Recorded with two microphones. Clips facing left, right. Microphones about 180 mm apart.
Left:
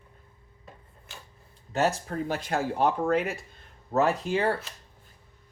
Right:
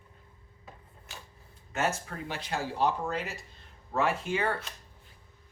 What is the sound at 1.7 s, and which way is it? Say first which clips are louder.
Speech: left 5 dB; 35° left (ahead or behind).